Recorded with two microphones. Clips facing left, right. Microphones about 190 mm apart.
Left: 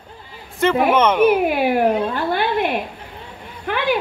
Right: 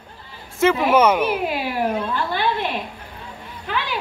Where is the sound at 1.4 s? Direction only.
55° left (ahead or behind).